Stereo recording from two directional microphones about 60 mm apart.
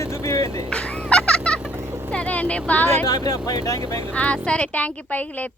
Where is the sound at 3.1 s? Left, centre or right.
Left.